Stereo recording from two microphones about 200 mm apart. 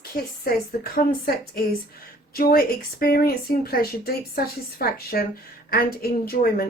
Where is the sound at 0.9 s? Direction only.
50° left (ahead or behind).